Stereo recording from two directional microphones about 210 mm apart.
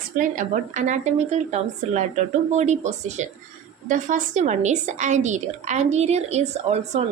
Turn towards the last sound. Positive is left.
turn(degrees=-30)  # may be behind; listen again after turning